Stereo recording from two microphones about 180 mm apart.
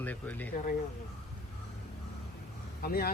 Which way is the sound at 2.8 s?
55° left (ahead or behind).